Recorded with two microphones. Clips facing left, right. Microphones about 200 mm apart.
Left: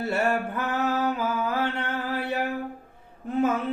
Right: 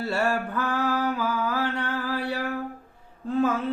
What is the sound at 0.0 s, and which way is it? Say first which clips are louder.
Mantra: left 1 dB; 20° left (ahead or behind).